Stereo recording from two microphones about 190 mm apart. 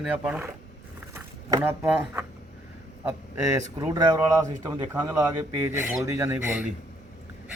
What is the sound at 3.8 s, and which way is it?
Speech, 20° right (ahead or behind).